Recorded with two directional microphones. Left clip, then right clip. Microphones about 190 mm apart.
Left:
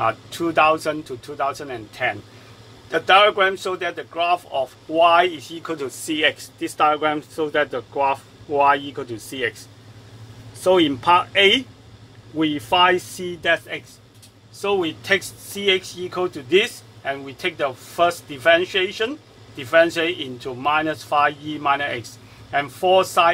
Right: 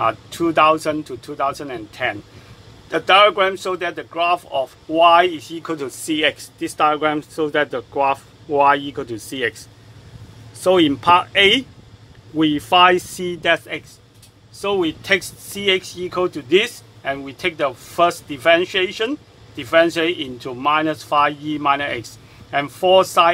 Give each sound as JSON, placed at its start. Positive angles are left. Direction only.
{"t": 0.0, "sound": "speech", "side_deg": -25}
{"t": 10.6, "sound": "speech", "side_deg": -25}
{"t": 14.6, "sound": "speech", "side_deg": -25}